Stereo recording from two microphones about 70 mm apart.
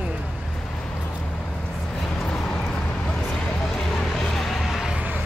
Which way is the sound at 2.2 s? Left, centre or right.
Centre.